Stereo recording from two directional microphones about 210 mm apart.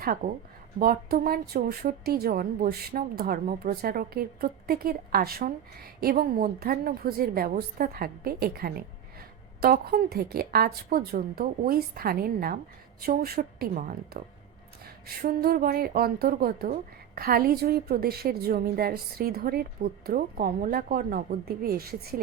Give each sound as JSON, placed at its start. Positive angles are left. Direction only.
{"t": 0.0, "sound": "a woman's voice", "side_deg": -45}